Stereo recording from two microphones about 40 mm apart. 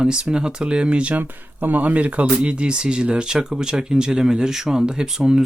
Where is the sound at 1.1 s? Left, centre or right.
Right.